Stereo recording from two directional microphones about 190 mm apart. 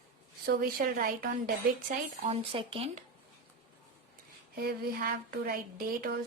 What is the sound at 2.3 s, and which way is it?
Speech, 25° right (ahead or behind).